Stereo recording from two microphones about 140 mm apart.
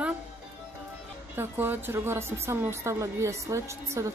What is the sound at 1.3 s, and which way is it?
Speech, 15° right (ahead or behind).